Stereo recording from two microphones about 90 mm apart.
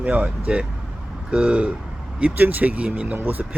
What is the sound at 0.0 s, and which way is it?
Speech, 15° right (ahead or behind).